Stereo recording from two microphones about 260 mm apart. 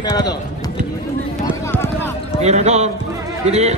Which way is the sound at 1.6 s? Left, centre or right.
Centre.